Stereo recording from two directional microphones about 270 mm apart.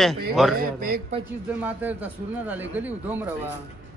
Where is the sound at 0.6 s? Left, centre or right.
Right.